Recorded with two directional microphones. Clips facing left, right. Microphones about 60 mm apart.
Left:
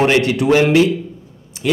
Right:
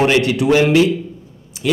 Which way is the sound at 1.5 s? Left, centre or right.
Left.